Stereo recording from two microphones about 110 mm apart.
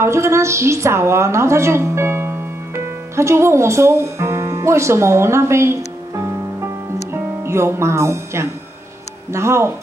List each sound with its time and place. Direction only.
0.0 s a woman's voice: 25° right (ahead or behind)
7.1 s music: 25° right (ahead or behind)
9.3 s speech: 25° right (ahead or behind)